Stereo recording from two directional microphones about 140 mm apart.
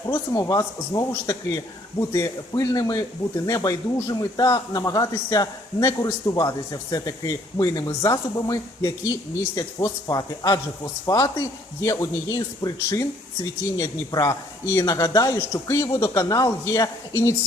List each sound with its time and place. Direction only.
0.1 s a man's voice: 25° left (ahead or behind)